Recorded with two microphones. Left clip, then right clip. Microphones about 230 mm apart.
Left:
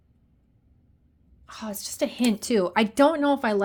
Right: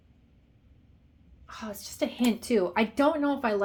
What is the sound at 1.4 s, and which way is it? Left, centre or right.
A woman's voice, left.